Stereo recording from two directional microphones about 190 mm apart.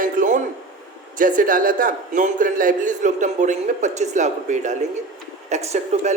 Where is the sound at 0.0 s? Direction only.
45° right (ahead or behind).